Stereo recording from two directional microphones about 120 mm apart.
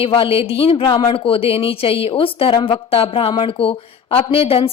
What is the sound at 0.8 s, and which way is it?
Speech, 35° left (ahead or behind).